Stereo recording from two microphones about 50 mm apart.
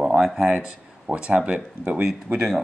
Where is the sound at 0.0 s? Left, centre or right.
Centre.